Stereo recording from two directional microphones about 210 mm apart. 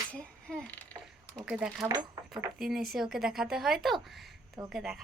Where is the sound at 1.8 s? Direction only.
15° right (ahead or behind).